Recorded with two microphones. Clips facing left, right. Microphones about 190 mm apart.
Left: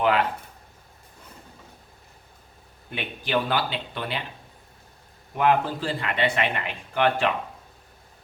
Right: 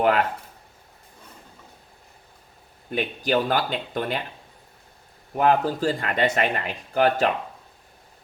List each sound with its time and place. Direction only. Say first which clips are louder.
0.0 s speech: right 2 dB; 45° right (ahead or behind)
2.9 s speech: right 4 dB; 40° right (ahead or behind)
5.4 s speech: right 2 dB; 40° right (ahead or behind)